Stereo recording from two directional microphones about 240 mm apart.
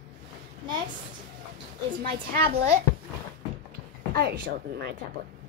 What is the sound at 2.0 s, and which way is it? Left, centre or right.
Speech, right.